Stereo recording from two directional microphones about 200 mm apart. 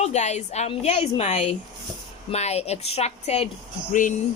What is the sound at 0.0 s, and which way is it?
A woman's voice, 35° left (ahead or behind).